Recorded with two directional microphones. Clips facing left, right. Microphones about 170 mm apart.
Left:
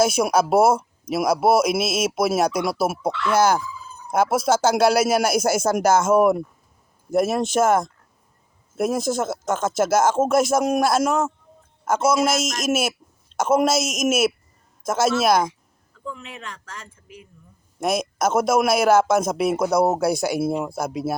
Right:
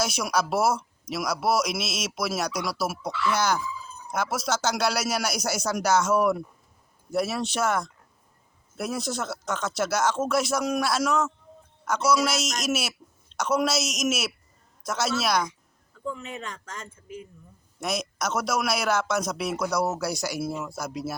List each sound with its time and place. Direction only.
0.0 s speech: 55° left (ahead or behind)
17.7 s speech: 50° left (ahead or behind)